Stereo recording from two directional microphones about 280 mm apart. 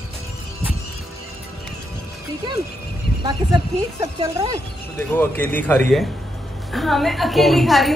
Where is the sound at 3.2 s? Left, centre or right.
Centre.